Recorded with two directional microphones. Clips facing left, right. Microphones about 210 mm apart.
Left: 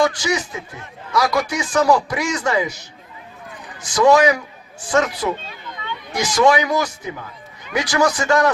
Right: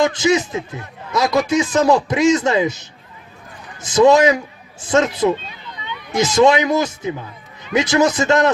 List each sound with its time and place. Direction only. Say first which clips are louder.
0.0 s a man's voice: right 4 dB; 20° right (ahead or behind)